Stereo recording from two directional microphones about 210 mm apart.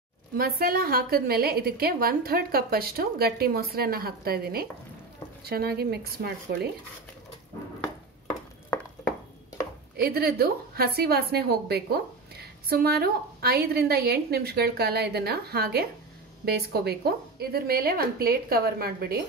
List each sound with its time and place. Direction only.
0.4 s a woman's voice: 45° right (ahead or behind)
9.9 s a woman's voice: 45° right (ahead or behind)